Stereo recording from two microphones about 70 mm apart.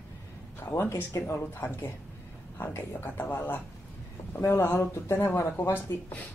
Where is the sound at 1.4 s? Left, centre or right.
Left.